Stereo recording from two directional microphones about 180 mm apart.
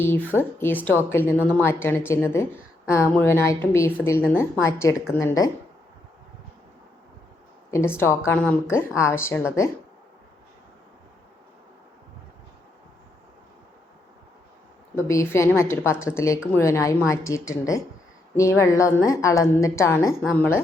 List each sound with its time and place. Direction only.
0.0 s a woman's voice: 10° left (ahead or behind)
7.7 s a woman's voice: 15° left (ahead or behind)
14.9 s a woman's voice: 15° left (ahead or behind)